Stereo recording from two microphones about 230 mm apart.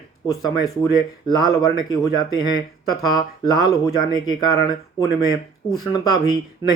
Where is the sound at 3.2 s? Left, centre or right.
Centre.